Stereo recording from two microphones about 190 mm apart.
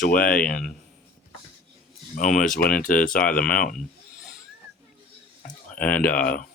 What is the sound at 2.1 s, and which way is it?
Speech, 45° left (ahead or behind).